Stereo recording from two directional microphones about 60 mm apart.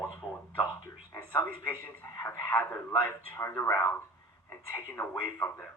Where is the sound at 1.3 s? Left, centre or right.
Left.